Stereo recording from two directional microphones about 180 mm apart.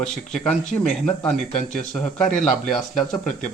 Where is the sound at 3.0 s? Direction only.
5° left (ahead or behind).